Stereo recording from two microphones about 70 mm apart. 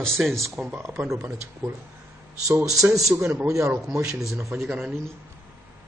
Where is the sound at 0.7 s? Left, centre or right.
Right.